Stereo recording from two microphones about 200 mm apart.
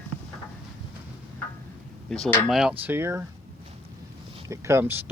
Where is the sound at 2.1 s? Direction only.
Centre (ahead or behind).